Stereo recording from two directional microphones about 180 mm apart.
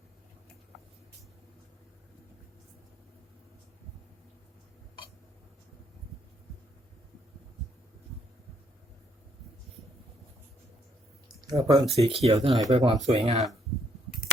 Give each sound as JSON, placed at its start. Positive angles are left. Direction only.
{"t": 11.3, "sound": "speech", "side_deg": -20}